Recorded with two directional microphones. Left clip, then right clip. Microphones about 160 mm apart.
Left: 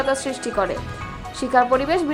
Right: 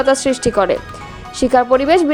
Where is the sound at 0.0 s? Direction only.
40° right (ahead or behind).